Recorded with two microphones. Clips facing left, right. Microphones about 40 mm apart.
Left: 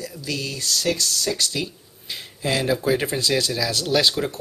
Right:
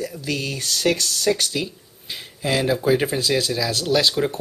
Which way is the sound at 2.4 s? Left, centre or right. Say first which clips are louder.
Right 2 dB; centre.